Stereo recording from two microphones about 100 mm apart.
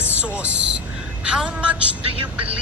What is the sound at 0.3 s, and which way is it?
Speech, 10° right (ahead or behind).